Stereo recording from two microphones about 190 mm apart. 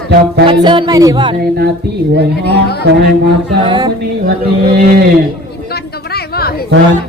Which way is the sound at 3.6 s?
20° right (ahead or behind).